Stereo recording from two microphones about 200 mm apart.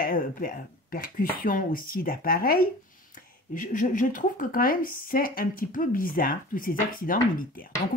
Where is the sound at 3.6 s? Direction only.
40° left (ahead or behind).